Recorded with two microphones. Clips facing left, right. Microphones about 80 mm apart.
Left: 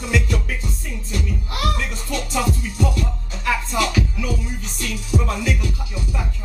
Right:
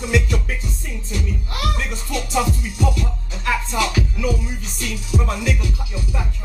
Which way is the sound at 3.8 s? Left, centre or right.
Centre.